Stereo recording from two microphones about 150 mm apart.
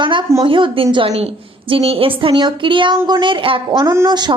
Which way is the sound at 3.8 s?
20° right (ahead or behind).